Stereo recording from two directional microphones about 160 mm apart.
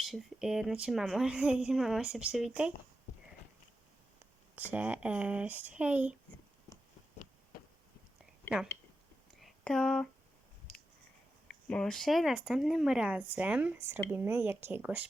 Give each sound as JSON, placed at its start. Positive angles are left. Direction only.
{"t": 0.0, "sound": "speech", "side_deg": 0}
{"t": 4.5, "sound": "speech", "side_deg": -10}
{"t": 9.4, "sound": "a sound", "side_deg": 5}
{"t": 11.4, "sound": "speech", "side_deg": 5}